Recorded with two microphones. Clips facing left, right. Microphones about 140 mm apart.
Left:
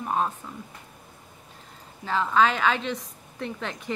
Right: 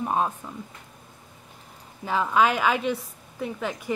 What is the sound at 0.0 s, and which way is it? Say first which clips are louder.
Speech: right 2 dB; 15° right (ahead or behind).